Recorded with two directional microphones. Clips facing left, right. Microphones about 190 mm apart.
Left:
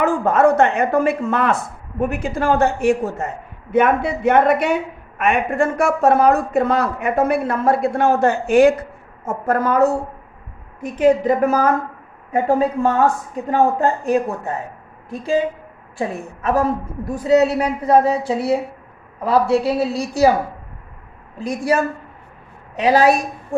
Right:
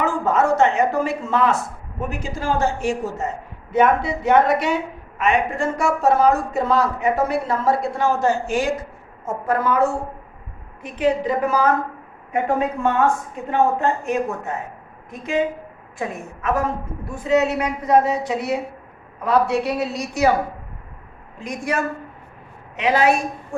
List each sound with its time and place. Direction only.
0.0 s a man's voice: 60° left (ahead or behind)
9.2 s a woman's voice: 45° left (ahead or behind)
12.3 s a woman's voice: 30° left (ahead or behind)
21.3 s a woman's voice: 35° left (ahead or behind)
23.5 s a sound: 35° left (ahead or behind)